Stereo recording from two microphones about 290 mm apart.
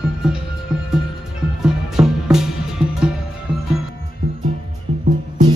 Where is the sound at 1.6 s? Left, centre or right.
Centre.